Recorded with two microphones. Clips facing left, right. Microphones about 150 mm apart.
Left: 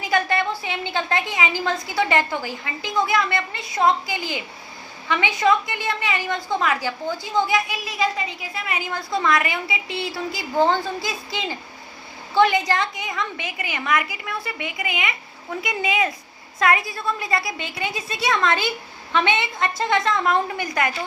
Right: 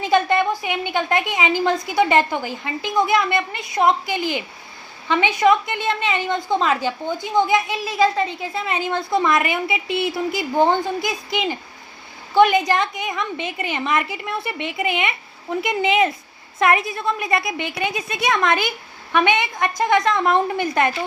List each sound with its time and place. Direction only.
0.0 s a woman's voice: 20° right (ahead or behind)